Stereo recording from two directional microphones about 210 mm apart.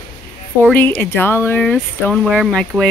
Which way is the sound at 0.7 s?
10° left (ahead or behind).